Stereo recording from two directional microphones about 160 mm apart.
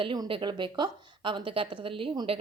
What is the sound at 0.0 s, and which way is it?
A woman's voice, 30° right (ahead or behind).